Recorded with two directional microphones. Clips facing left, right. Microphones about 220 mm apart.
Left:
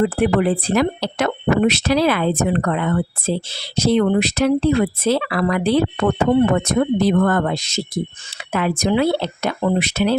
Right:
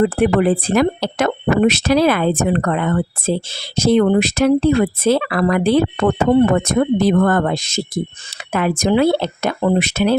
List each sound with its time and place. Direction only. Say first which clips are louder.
0.0 s speech: right 2 dB; 50° right (ahead or behind)